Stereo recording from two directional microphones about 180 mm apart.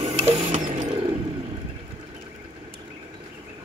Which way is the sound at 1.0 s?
30° right (ahead or behind).